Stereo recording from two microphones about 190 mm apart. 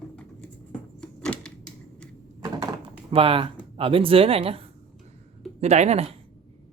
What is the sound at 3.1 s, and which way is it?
Speech, 30° right (ahead or behind).